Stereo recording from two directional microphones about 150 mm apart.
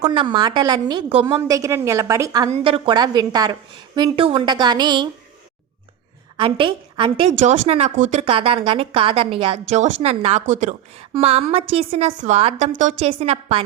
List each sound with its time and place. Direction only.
0.1 s a woman's voice: 35° right (ahead or behind)
2.5 s a woman's voice: 35° right (ahead or behind)
6.3 s a woman's voice: 35° right (ahead or behind)
7.3 s a woman's voice: 50° right (ahead or behind)
8.2 s a woman's voice: 40° right (ahead or behind)
11.1 s a woman's voice: 40° right (ahead or behind)
13.1 s a woman's voice: 45° right (ahead or behind)